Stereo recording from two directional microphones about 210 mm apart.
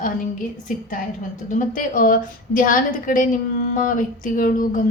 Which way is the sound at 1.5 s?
40° left (ahead or behind).